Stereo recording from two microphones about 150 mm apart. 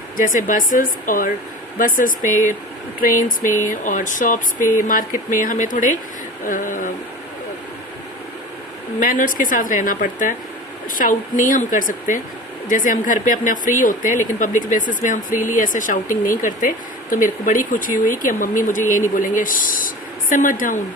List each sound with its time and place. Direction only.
0.2 s speech: 60° left (ahead or behind)
9.0 s speech: 65° left (ahead or behind)